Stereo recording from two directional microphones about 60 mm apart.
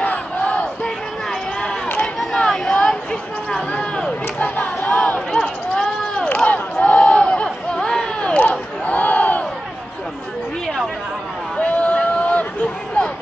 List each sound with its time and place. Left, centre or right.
0.0 s battle cry: left
2.3 s a sound: centre
6.2 s crowd: left
7.4 s chatter: centre
8.2 s crowd: left
11.5 s a sound: left